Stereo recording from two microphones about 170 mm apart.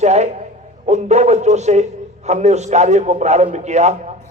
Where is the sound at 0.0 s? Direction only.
40° right (ahead or behind).